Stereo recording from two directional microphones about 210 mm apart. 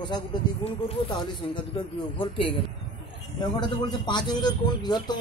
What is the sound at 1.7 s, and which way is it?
Speech, 25° left (ahead or behind).